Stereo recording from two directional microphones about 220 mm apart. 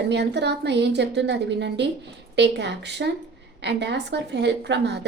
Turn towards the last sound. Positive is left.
turn(degrees=-50)  # may be behind; listen again after turning